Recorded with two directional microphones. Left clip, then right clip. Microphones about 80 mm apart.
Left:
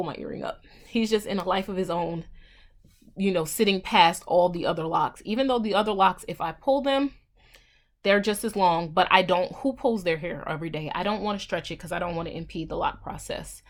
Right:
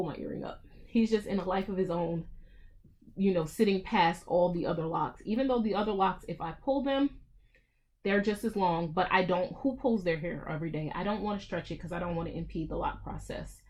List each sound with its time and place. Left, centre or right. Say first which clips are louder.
0.0 s speech: left 5 dB; left
3.2 s speech: left 4 dB; left